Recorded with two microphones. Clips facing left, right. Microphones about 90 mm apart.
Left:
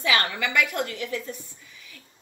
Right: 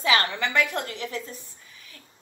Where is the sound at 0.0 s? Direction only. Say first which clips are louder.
Right 1 dB; 30° right (ahead or behind).